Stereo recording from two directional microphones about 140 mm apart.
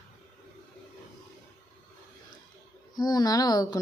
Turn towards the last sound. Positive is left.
turn(degrees=25)  # may be behind; listen again after turning